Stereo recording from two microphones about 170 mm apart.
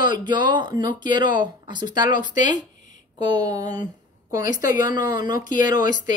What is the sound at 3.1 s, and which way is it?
A woman's voice, 25° right (ahead or behind).